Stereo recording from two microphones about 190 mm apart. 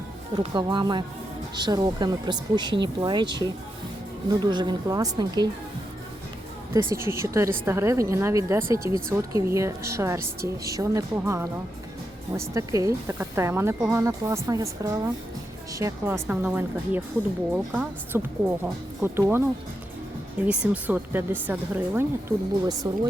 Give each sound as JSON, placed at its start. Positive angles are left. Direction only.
{"t": 0.3, "sound": "speech", "side_deg": -25}
{"t": 6.9, "sound": "a woman's voice", "side_deg": -15}
{"t": 20.4, "sound": "speech", "side_deg": -5}